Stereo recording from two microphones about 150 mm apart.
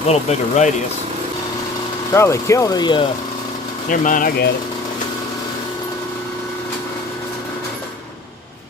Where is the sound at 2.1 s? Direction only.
20° left (ahead or behind).